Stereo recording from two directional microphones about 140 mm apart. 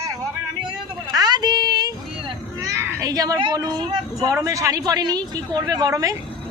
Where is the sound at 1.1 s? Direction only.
30° right (ahead or behind).